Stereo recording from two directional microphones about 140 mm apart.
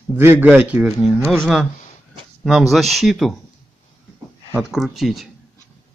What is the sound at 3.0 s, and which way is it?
Speech, centre (ahead or behind).